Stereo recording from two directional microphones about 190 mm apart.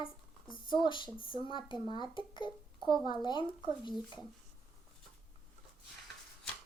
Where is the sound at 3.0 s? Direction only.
25° left (ahead or behind).